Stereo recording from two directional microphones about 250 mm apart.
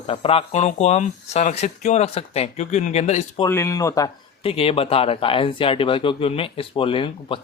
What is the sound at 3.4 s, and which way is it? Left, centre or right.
Speech, centre.